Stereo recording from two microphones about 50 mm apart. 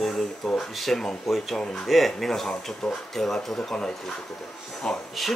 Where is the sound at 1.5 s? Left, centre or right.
Centre.